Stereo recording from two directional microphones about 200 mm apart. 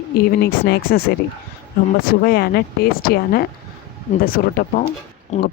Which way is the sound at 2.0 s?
50° left (ahead or behind).